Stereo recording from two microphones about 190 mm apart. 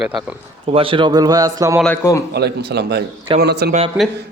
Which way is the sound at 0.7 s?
30° right (ahead or behind).